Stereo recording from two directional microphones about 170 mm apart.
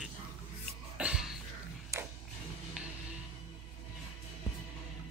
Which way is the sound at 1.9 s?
15° right (ahead or behind).